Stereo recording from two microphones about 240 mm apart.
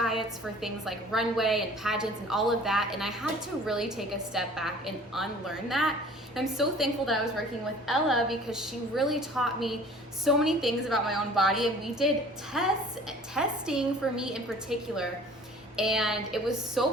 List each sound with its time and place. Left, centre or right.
0.0 s a woman's voice: centre